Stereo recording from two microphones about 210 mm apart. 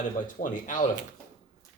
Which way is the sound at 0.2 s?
40° left (ahead or behind).